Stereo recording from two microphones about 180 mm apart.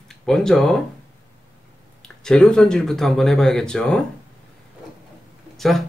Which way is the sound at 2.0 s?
5° left (ahead or behind).